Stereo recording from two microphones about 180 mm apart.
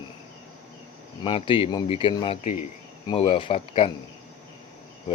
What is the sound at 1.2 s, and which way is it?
Speech, 30° left (ahead or behind).